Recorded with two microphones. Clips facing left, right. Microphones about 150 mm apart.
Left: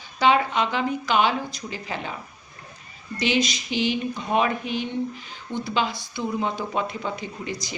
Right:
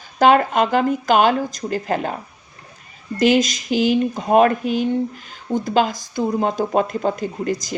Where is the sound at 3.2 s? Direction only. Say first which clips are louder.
Right 8 dB; 45° right (ahead or behind).